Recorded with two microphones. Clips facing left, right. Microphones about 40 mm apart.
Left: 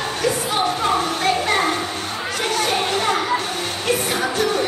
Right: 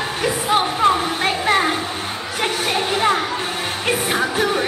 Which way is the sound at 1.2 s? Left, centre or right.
Right.